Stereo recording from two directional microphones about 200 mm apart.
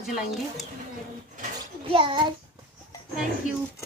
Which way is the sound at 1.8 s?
25° right (ahead or behind).